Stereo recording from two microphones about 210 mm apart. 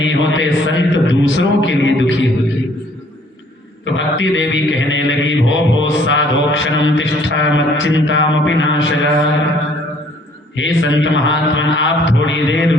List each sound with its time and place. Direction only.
0.0 s mantra: 60° left (ahead or behind)
3.8 s mantra: 60° left (ahead or behind)
10.5 s mantra: 60° left (ahead or behind)